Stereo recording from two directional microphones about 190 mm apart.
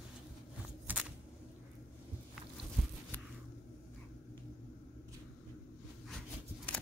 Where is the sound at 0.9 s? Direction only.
10° right (ahead or behind).